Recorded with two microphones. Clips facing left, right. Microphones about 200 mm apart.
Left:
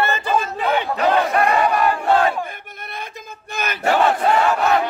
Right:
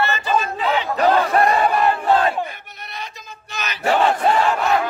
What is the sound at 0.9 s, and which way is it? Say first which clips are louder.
Speech: right 3 dB; 35° right (ahead or behind).